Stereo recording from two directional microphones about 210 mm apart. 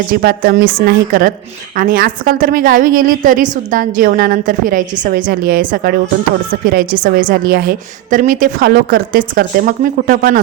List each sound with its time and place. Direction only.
0.1 s a woman's voice: 45° right (ahead or behind)